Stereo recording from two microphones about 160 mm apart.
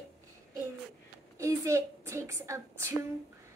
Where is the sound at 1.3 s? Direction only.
20° right (ahead or behind).